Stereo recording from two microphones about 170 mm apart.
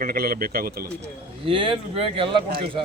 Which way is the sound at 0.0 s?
60° right (ahead or behind).